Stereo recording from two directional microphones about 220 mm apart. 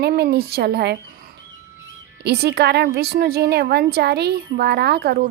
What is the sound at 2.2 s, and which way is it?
A woman's voice, 50° right (ahead or behind).